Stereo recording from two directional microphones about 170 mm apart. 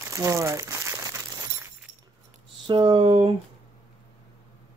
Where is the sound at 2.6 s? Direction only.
30° right (ahead or behind).